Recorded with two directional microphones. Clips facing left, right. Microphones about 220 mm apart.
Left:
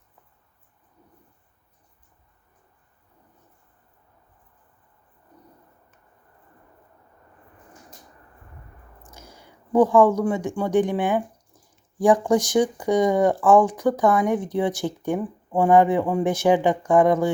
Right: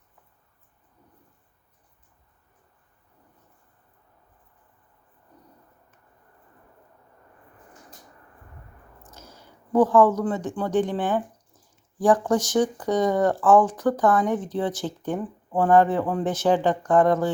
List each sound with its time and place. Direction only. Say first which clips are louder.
9.0 s speech: left 1 dB; 10° left (ahead or behind)